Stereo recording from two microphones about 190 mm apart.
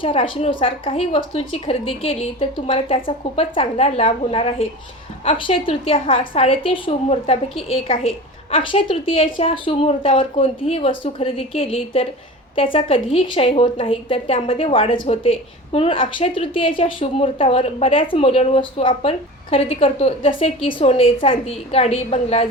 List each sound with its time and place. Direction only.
0.0 s a woman's voice: 30° left (ahead or behind)